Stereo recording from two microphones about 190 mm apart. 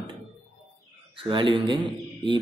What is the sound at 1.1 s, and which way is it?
Speech, 25° right (ahead or behind).